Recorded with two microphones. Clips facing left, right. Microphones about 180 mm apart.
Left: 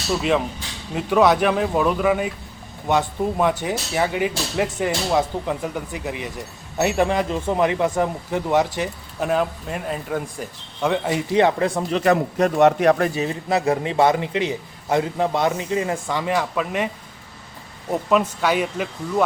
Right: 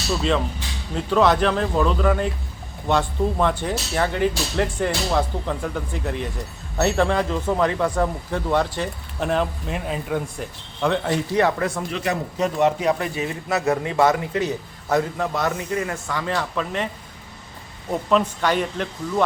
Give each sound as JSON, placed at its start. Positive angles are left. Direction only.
{"t": 0.9, "sound": "speech", "side_deg": 10}
{"t": 11.3, "sound": "a man's voice", "side_deg": 20}
{"t": 11.7, "sound": "a man's voice", "side_deg": 35}
{"t": 12.1, "sound": "a man's voice", "side_deg": 60}
{"t": 13.1, "sound": "a man's voice", "side_deg": 30}
{"t": 18.1, "sound": "speech", "side_deg": 10}